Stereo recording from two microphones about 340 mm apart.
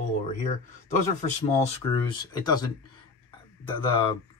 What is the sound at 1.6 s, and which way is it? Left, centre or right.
Speech, centre.